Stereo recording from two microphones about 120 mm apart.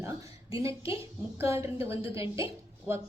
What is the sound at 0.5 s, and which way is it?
Speech, 25° right (ahead or behind).